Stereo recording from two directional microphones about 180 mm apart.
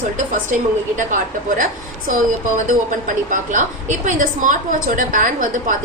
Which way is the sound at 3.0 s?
45° right (ahead or behind).